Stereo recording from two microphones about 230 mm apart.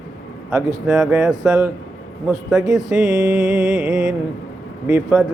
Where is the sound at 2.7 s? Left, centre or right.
Centre.